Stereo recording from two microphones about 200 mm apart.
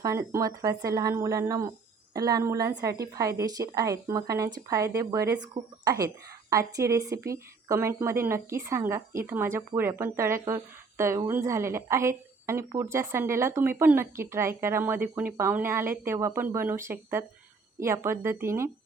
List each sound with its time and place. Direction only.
0.0 s a woman's voice: 15° right (ahead or behind)